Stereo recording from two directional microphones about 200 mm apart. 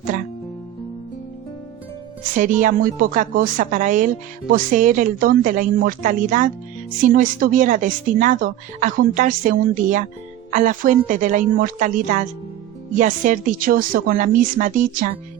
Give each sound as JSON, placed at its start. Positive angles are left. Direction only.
{"t": 2.4, "sound": "speech", "side_deg": -40}